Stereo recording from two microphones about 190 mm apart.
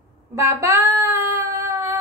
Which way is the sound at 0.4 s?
15° right (ahead or behind).